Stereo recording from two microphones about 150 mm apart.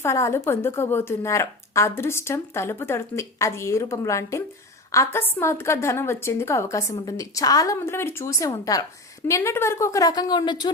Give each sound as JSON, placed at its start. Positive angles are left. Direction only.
{"t": 0.0, "sound": "a woman's voice", "side_deg": 20}